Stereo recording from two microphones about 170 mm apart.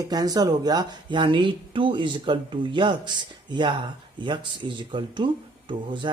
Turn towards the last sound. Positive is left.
turn(degrees=-30)  # may be behind; listen again after turning